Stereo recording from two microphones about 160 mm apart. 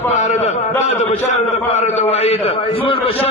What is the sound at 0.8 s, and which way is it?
A man's voice, 45° left (ahead or behind).